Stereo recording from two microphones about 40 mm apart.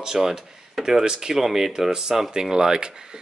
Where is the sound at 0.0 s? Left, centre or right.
Centre.